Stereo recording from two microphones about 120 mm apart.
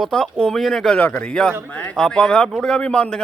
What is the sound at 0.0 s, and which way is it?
Speech, 5° left (ahead or behind).